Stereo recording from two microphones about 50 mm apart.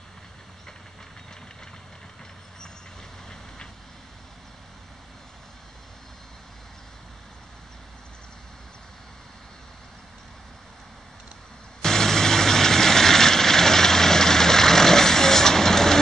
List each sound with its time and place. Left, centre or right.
11.8 s vehicle: centre